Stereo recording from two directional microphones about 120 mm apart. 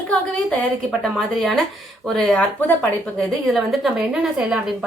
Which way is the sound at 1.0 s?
Centre (ahead or behind).